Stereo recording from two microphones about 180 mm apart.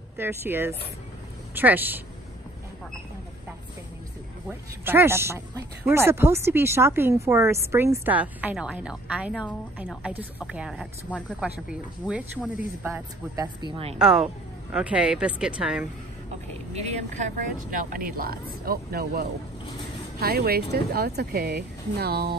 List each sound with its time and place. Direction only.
0.2 s speech: 10° right (ahead or behind)
4.5 s speech: 10° right (ahead or behind); by 11.4 s 5° left (ahead or behind)
11.4 s speech: 5° right (ahead or behind)
13.7 s speech: 30° right (ahead or behind)
13.9 s speech: centre (ahead or behind)
16.7 s speech: 40° right (ahead or behind); by 22.4 s 60° right (ahead or behind)